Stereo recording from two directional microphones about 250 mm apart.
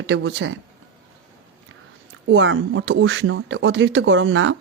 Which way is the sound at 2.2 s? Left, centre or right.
Right.